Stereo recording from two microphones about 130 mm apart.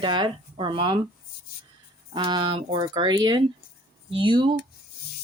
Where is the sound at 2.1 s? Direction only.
35° right (ahead or behind).